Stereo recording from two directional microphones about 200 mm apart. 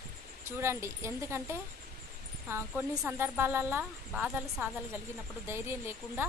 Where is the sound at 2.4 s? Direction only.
10° right (ahead or behind).